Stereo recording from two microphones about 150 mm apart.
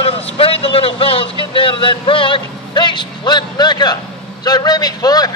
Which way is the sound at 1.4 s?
35° left (ahead or behind).